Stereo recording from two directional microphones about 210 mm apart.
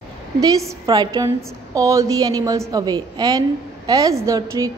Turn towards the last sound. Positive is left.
turn(degrees=-15)  # may be behind; listen again after turning